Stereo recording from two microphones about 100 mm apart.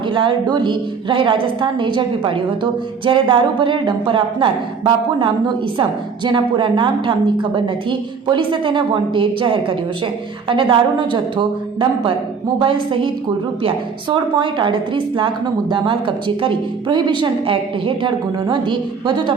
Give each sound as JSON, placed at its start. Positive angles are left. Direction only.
{"t": 0.1, "sound": "a woman's voice", "side_deg": -55}